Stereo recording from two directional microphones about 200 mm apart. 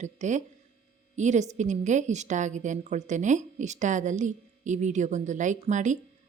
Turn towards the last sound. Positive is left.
turn(degrees=-40)  # may be behind; listen again after turning